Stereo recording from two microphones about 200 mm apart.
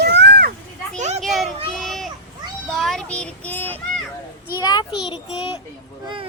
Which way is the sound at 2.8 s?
Centre (ahead or behind).